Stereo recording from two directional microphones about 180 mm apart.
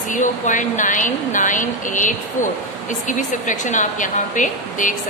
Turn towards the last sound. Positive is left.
turn(degrees=45)  # may be behind; listen again after turning